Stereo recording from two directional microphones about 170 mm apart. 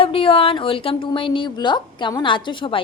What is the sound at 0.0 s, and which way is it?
A woman's voice, 30° left (ahead or behind).